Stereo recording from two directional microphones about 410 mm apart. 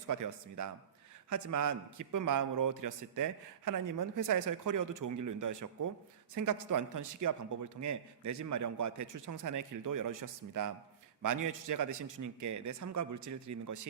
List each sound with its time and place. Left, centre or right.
0.1 s a man's voice: right